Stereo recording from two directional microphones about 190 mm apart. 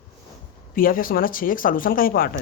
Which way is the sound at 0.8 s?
50° left (ahead or behind).